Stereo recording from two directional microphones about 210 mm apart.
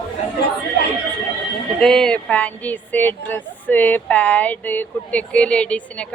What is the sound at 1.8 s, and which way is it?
A woman's voice, 5° left (ahead or behind).